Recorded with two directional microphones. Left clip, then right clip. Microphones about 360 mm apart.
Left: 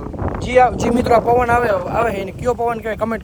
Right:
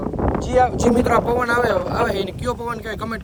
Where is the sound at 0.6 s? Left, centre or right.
Left.